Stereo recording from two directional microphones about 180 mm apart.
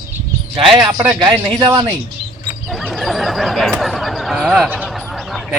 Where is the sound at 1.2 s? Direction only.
25° right (ahead or behind).